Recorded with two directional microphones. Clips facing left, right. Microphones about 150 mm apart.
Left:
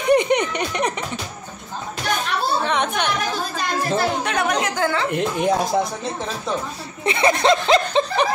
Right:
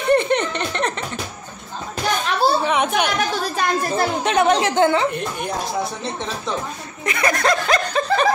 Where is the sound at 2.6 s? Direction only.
5° right (ahead or behind).